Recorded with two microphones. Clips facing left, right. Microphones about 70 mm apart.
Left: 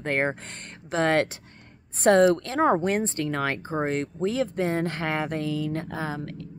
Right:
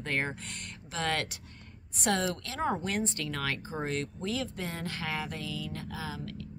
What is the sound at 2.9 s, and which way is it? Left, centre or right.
Speech, left.